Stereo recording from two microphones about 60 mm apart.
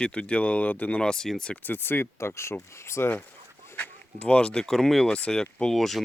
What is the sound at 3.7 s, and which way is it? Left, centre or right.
Speech, left.